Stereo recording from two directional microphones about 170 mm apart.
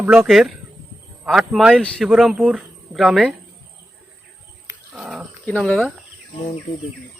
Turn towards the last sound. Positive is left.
turn(degrees=5)  # may be behind; listen again after turning